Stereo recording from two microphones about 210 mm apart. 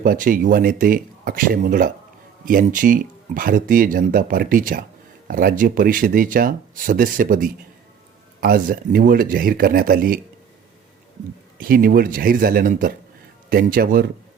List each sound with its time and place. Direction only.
0.0 s speech: 40° right (ahead or behind)
11.5 s speech: 45° right (ahead or behind)